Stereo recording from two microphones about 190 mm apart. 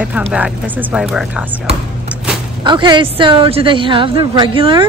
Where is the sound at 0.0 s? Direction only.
5° right (ahead or behind).